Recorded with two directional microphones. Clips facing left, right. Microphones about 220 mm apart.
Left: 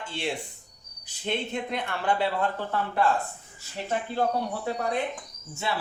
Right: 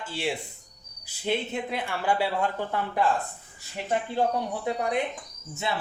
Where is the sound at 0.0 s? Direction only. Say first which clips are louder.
Right 1 dB; 5° right (ahead or behind).